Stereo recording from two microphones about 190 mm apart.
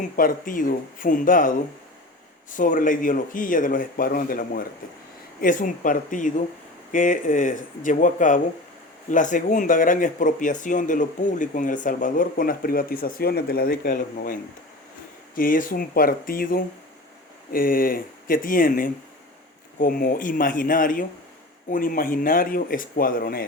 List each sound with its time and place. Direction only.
0.0 s speech: 45° left (ahead or behind)
15.4 s speech: 45° left (ahead or behind)